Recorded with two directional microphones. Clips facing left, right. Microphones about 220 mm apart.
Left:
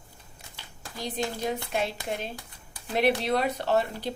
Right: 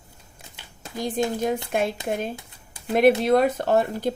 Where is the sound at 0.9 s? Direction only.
50° right (ahead or behind).